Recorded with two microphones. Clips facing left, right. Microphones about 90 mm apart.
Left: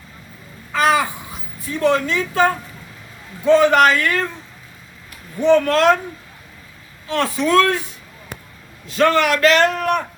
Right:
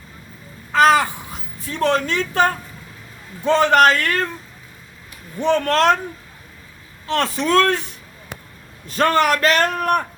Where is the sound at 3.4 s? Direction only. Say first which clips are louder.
Left 1 dB; 55° right (ahead or behind).